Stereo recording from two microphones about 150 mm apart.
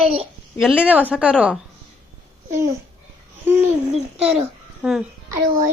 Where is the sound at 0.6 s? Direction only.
5° right (ahead or behind).